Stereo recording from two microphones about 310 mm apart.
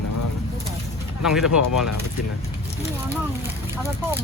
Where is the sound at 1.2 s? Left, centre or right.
Centre.